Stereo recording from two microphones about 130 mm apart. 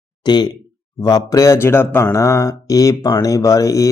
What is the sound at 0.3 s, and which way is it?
Speech, 35° left (ahead or behind).